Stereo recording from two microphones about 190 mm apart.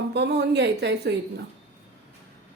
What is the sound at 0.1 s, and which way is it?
Speech, 60° right (ahead or behind).